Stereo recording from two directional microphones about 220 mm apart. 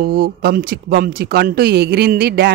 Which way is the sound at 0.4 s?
40° right (ahead or behind).